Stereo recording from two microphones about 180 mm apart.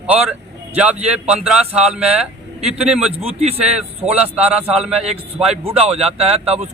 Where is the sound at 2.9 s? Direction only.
5° right (ahead or behind).